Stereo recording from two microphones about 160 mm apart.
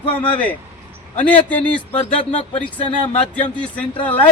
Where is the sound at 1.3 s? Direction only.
10° left (ahead or behind).